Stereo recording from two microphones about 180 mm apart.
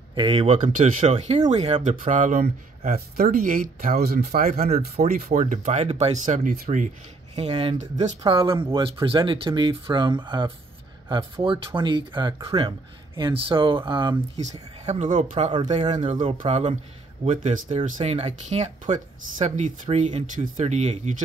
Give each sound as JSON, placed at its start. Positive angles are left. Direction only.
{"t": 0.1, "sound": "speech", "side_deg": -30}
{"t": 7.3, "sound": "speech", "side_deg": -30}
{"t": 8.2, "sound": "speech", "side_deg": -25}
{"t": 14.9, "sound": "speech", "side_deg": -40}